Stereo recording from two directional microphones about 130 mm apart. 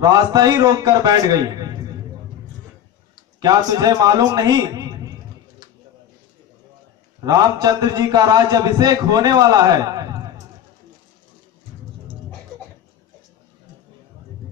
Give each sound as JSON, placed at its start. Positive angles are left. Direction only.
{"t": 0.0, "sound": "a man's voice", "side_deg": -30}
{"t": 3.3, "sound": "a man's voice", "side_deg": -30}
{"t": 7.2, "sound": "a man's voice", "side_deg": -30}